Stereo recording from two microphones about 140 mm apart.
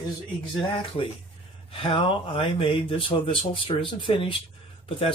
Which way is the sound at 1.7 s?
40° left (ahead or behind).